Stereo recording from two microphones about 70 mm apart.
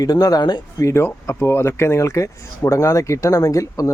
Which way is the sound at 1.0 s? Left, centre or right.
Left.